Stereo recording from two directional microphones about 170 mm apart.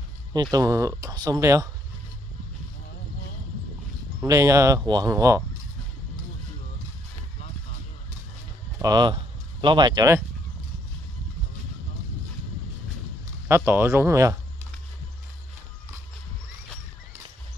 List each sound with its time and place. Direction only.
0.3 s speech: 20° right (ahead or behind)
4.2 s speech: 20° right (ahead or behind)
8.7 s a sound: 25° right (ahead or behind)
13.7 s speech: 15° right (ahead or behind)